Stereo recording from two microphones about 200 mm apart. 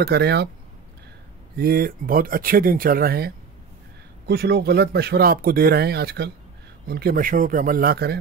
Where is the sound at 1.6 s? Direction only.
50° right (ahead or behind).